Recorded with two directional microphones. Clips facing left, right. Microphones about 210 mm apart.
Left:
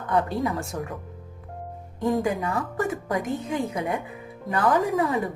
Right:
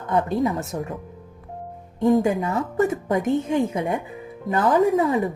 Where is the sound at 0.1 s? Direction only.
20° right (ahead or behind).